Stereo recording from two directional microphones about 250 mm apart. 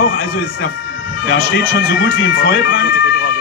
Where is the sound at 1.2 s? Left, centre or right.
Left.